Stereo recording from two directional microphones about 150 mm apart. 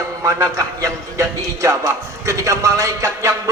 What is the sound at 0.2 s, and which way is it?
A man's voice, 20° right (ahead or behind).